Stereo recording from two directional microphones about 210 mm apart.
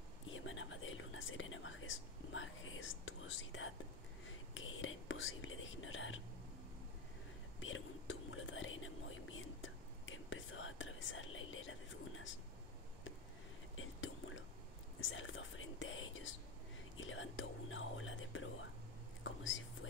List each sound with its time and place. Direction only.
0.3 s speech: 70° left (ahead or behind)
7.6 s whispering: 65° left (ahead or behind)
13.7 s whispering: 70° left (ahead or behind)
15.0 s speech: 70° left (ahead or behind)
19.2 s whispering: 70° left (ahead or behind)